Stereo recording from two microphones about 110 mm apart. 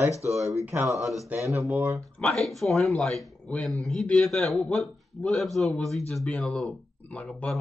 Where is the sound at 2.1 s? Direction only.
5° left (ahead or behind).